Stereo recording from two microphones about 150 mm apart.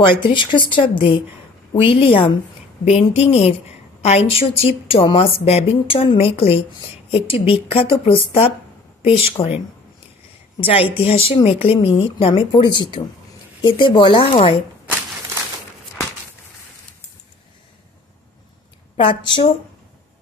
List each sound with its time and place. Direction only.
0.2 s a woman's voice: 30° left (ahead or behind)
10.6 s a woman's voice: 40° left (ahead or behind)
18.9 s a woman's voice: 35° left (ahead or behind)